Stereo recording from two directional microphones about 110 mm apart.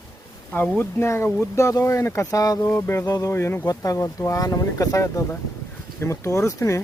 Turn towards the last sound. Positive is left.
turn(degrees=30)  # may be behind; listen again after turning